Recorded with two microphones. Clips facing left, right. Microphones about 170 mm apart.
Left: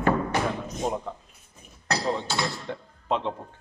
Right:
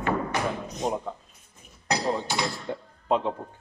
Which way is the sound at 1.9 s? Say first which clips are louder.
Right 1 dB; 15° right (ahead or behind).